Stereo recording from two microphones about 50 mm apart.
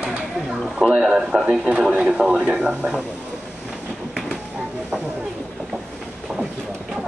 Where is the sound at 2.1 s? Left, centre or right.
Right.